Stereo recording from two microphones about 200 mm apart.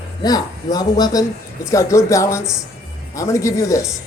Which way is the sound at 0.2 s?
20° left (ahead or behind).